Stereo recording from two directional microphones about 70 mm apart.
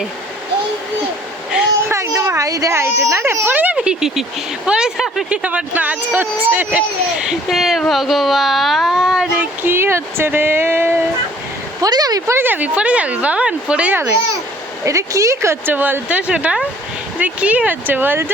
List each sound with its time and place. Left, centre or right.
1.9 s speech: right
2.7 s speech: right
3.5 s speech: right
3.8 s speech: centre; by 6.7 s right
6.7 s speech: centre
9.6 s speech: right
11.8 s speech: right
12.3 s speech: right
14.8 s speech: right
15.6 s speech: right